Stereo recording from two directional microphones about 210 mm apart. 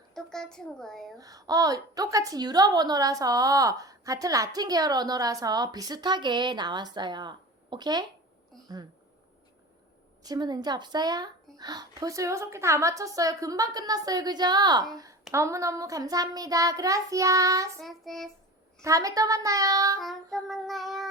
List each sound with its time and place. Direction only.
0.1 s child singing: 5° left (ahead or behind)
1.2 s a woman's voice: 15° right (ahead or behind)
10.2 s a woman's voice: 20° right (ahead or behind)
17.8 s child singing: centre (ahead or behind)
18.8 s a woman's voice: 15° right (ahead or behind)
20.0 s child singing: centre (ahead or behind)